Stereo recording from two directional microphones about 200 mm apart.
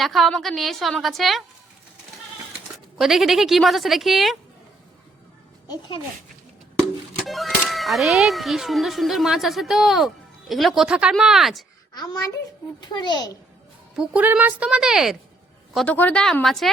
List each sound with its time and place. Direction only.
0.0 s a child's voice: centre (ahead or behind)
2.7 s a child's voice: centre (ahead or behind)
7.3 s a child's voice: centre (ahead or behind)
11.9 s a child's voice: 20° left (ahead or behind)
13.9 s a child's voice: 5° right (ahead or behind)